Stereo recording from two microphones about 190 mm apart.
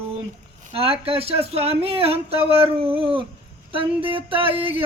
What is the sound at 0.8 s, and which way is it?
Speech, 30° right (ahead or behind).